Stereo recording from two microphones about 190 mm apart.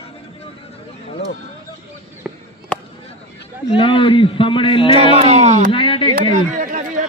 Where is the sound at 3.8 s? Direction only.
25° left (ahead or behind).